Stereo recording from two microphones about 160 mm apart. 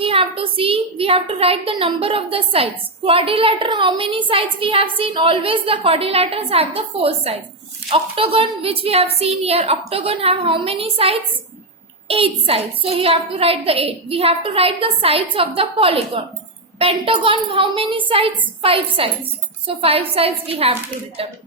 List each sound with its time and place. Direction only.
0.0 s a woman's voice: 35° right (ahead or behind)